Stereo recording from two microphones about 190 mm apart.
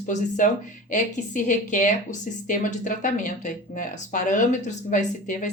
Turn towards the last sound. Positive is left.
turn(degrees=40)  # may be behind; listen again after turning